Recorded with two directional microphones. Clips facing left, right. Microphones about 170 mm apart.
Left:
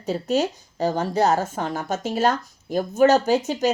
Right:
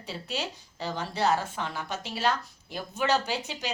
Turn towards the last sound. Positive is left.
turn(degrees=45)  # may be behind; listen again after turning